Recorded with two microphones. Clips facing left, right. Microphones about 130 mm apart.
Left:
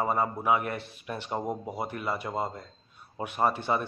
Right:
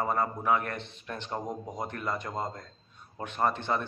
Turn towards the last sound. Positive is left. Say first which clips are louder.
# left 2 dB
turn(degrees=10)  # may be behind; listen again after turning